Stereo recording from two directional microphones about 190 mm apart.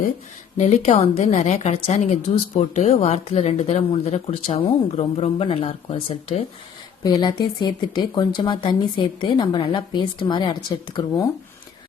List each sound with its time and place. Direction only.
0.5 s speech: 40° left (ahead or behind)
7.0 s speech: 20° left (ahead or behind)